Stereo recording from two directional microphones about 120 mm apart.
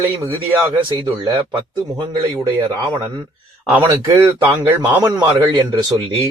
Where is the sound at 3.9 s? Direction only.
25° right (ahead or behind).